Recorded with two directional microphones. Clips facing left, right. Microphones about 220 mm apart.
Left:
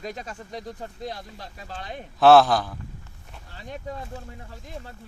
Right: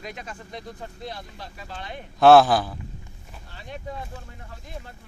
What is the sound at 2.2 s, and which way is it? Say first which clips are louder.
Speech: right 1 dB; centre (ahead or behind).